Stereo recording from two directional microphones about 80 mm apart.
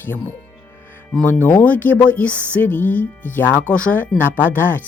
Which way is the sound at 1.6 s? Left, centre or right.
Left.